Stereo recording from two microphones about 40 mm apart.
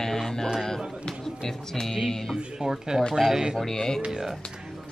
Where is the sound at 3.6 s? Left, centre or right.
Centre.